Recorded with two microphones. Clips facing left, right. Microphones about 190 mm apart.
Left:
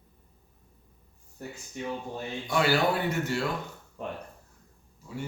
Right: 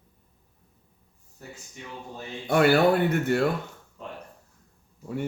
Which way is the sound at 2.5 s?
55° right (ahead or behind).